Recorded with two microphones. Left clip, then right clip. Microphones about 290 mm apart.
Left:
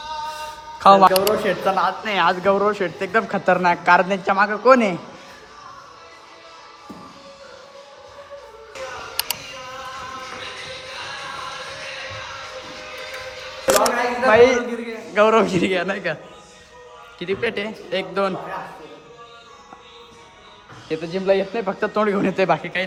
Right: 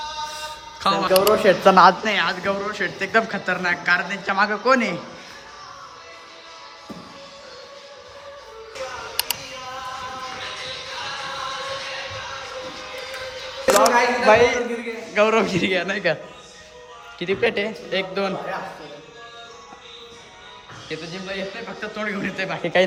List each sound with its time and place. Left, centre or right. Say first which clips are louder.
0.8 s a man's voice: left 6 dB; centre
1.5 s speech: right 7 dB; right
2.0 s a man's voice: left 4 dB; centre
9.1 s a sound: even; centre
13.7 s a sound: right 2 dB; centre
15.1 s a man's voice: left 3 dB; centre
17.2 s a man's voice: right 2 dB; centre
20.8 s speech: left 11 dB; centre
22.6 s speech: right 6 dB; centre